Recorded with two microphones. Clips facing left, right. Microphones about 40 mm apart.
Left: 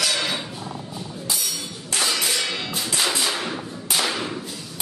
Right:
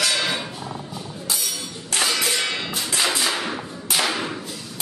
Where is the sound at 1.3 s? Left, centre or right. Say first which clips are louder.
Right 1 dB; centre.